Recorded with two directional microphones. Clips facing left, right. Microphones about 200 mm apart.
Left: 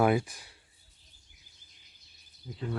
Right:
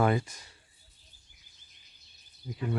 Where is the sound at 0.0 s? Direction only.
10° left (ahead or behind).